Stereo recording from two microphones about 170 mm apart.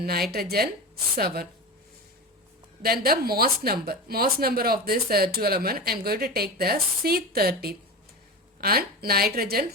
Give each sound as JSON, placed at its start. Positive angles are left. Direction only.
{"t": 0.0, "sound": "speech", "side_deg": -65}
{"t": 2.8, "sound": "speech", "side_deg": -65}